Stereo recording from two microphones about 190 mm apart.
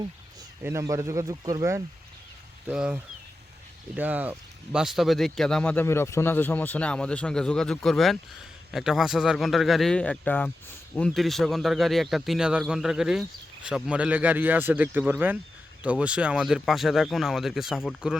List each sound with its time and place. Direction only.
0.6 s speech: 15° right (ahead or behind)
2.6 s speech: 5° right (ahead or behind)